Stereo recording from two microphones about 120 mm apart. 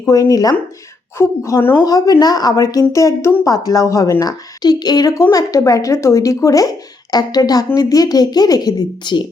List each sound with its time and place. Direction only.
0.1 s a woman's voice: 30° left (ahead or behind)